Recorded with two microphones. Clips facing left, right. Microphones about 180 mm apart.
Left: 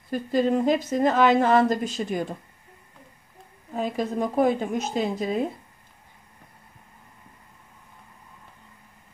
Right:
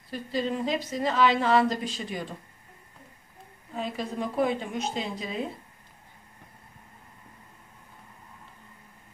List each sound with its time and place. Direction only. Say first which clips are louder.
0.1 s a woman's voice: left 7 dB; 50° left (ahead or behind)
3.7 s a woman's voice: left 5 dB; 45° left (ahead or behind)